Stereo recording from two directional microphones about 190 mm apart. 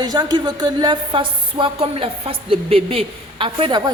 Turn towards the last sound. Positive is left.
turn(degrees=-25)  # may be behind; listen again after turning